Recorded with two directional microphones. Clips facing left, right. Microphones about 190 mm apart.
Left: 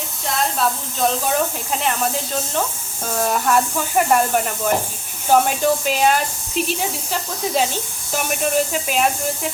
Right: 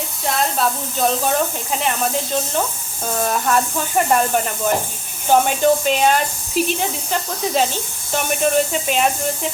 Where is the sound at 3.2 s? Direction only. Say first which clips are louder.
Left 1 dB; 5° left (ahead or behind).